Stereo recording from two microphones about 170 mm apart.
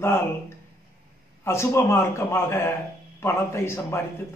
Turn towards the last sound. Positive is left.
turn(degrees=15)  # may be behind; listen again after turning